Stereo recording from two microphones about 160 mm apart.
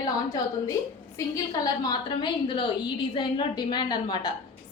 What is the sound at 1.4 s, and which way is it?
A woman's voice, 25° left (ahead or behind).